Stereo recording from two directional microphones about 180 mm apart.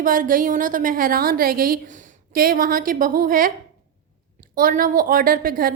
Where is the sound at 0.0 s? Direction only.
50° right (ahead or behind).